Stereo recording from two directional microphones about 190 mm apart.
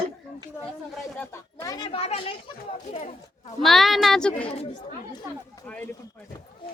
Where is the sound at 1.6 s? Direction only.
20° left (ahead or behind); by 3.5 s 35° left (ahead or behind).